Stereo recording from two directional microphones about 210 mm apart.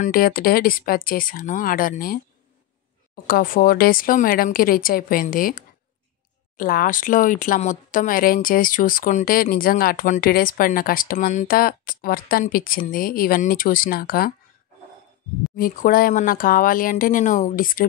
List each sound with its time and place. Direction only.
0.0 s speech: 45° left (ahead or behind)
3.3 s speech: 45° left (ahead or behind)
15.5 s speech: 40° left (ahead or behind)